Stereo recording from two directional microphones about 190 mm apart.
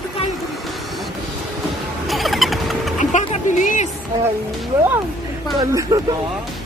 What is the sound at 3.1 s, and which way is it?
Speech, 40° left (ahead or behind).